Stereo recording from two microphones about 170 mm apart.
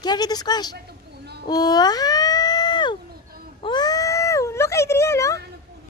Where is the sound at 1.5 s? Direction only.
25° left (ahead or behind).